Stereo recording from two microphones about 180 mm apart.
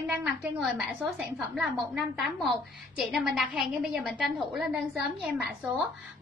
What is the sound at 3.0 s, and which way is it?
A woman's voice, centre (ahead or behind).